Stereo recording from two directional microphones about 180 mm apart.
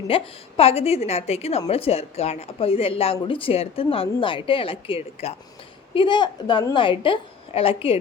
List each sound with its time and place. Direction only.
0.1 s a woman's voice: 30° left (ahead or behind)